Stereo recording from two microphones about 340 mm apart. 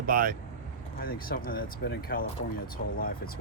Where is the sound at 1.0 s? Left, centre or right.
Left.